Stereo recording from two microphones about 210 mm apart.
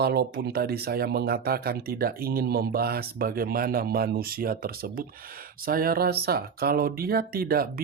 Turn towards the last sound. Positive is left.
turn(degrees=-45)  # may be behind; listen again after turning